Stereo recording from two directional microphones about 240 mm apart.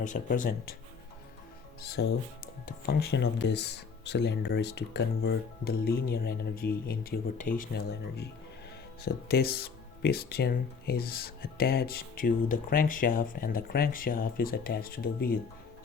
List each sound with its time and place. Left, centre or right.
0.0 s speech: left
1.8 s speech: left